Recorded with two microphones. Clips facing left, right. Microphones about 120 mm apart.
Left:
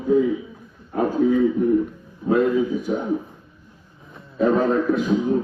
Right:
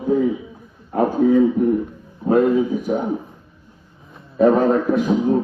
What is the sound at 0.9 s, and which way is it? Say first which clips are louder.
A man's voice: right 3 dB; 50° right (ahead or behind).